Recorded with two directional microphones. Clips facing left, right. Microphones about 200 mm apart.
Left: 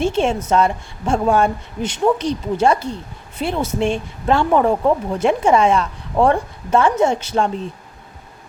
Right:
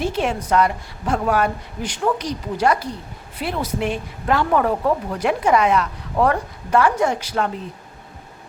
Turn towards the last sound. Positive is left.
turn(degrees=25)  # may be behind; listen again after turning